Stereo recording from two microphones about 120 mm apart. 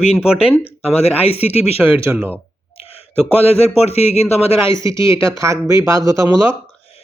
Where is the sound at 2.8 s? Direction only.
55° left (ahead or behind).